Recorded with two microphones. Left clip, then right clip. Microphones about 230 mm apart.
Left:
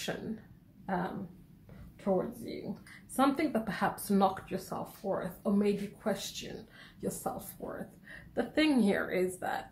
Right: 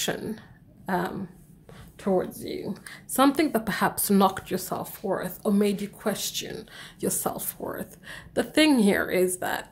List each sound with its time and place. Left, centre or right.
0.8 s speech: right